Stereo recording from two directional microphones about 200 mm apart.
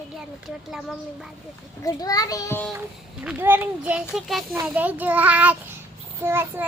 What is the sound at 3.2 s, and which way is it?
A child's voice, 5° right (ahead or behind).